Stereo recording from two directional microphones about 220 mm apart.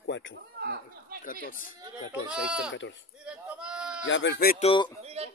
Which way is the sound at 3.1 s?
5° right (ahead or behind).